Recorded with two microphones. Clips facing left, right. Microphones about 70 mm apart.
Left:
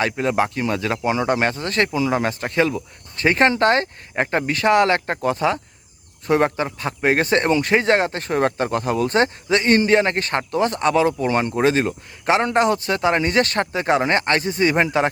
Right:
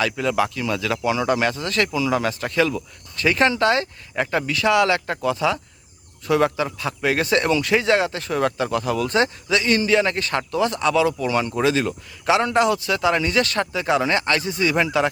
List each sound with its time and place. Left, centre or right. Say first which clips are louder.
0.0 s a man's voice: left 1 dB; left